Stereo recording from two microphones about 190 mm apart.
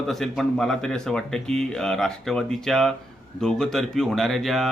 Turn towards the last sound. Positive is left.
turn(degrees=0)  # may be behind; listen again after turning